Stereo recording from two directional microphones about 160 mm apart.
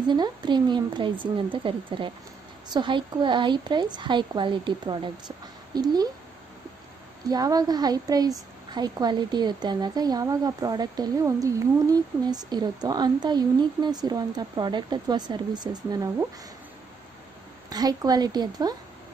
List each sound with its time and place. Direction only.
0.1 s a woman's voice: 25° right (ahead or behind)
7.2 s a woman's voice: 25° right (ahead or behind)
17.6 s a woman's voice: 25° right (ahead or behind)